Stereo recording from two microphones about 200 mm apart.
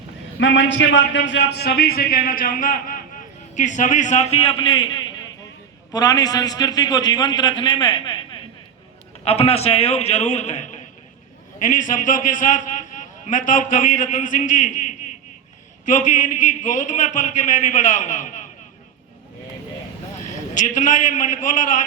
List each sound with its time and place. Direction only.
0.3 s a man's voice: 65° left (ahead or behind); by 8.2 s 25° left (ahead or behind)
9.2 s a man's voice: 30° left (ahead or behind)
15.9 s a man's voice: 40° left (ahead or behind)
20.5 s a man's voice: 40° left (ahead or behind)